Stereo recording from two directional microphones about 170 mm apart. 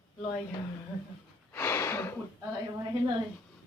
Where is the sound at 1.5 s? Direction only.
15° left (ahead or behind).